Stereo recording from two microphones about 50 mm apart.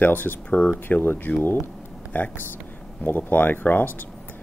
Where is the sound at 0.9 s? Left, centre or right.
Left.